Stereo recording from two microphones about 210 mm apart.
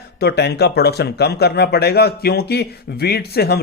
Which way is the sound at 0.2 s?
50° left (ahead or behind).